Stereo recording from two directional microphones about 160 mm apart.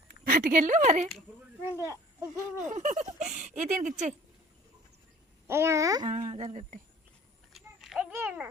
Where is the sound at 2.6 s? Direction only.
50° right (ahead or behind).